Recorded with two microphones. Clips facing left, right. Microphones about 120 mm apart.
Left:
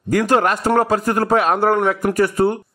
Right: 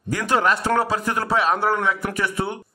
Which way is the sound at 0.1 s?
45° left (ahead or behind).